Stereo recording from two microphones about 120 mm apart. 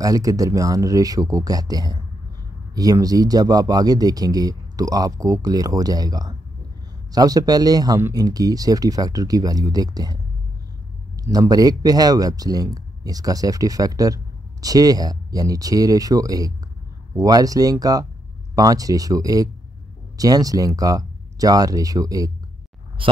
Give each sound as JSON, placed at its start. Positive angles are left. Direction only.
{"t": 0.0, "sound": "speech", "side_deg": -30}
{"t": 11.2, "sound": "speech", "side_deg": -30}